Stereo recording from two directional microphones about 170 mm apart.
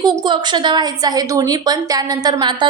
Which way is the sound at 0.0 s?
25° right (ahead or behind).